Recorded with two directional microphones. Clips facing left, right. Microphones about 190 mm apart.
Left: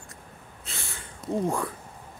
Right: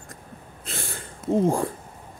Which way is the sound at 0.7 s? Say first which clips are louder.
Right 7 dB; 55° right (ahead or behind).